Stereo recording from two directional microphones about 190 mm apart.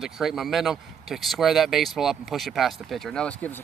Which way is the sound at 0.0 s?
Centre (ahead or behind).